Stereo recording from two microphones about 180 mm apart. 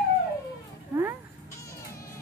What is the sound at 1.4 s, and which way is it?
Baby cry, 15° left (ahead or behind).